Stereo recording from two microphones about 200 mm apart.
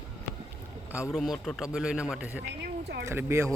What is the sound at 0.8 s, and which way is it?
Speech, 5° right (ahead or behind).